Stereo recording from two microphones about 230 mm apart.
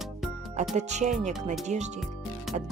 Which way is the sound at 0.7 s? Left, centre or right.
Right.